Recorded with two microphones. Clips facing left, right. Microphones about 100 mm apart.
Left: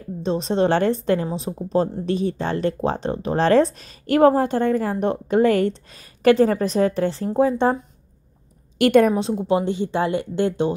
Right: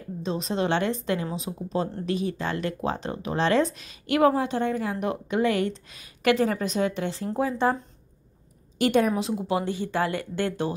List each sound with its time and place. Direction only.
0.2 s speech: 35° left (ahead or behind)
8.7 s a woman's voice: 60° left (ahead or behind)
9.1 s speech: 25° left (ahead or behind)